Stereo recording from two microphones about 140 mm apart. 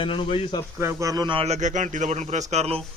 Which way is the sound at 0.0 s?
40° left (ahead or behind).